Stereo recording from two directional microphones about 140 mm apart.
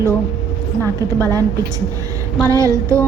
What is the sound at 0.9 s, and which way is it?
Speech, 25° right (ahead or behind).